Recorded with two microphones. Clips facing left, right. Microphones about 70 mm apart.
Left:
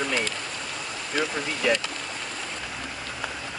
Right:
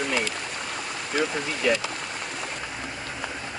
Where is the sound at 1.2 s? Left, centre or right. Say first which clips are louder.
Right 2 dB; right.